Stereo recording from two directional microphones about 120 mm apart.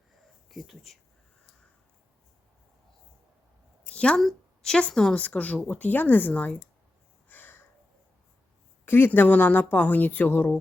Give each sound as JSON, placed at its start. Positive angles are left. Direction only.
{"t": 0.5, "sound": "speech", "side_deg": 0}
{"t": 3.8, "sound": "a woman's voice", "side_deg": 10}
{"t": 7.3, "sound": "a sound", "side_deg": 15}
{"t": 8.9, "sound": "a woman's voice", "side_deg": 15}